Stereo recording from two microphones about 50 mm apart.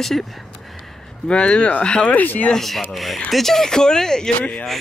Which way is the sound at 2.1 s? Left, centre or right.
Left.